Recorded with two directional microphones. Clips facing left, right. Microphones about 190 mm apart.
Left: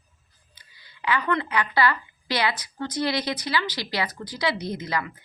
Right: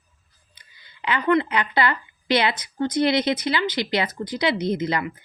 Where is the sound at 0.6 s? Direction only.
20° right (ahead or behind).